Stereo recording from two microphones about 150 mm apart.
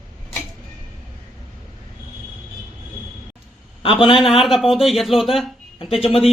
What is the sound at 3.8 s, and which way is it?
Speech, 35° left (ahead or behind).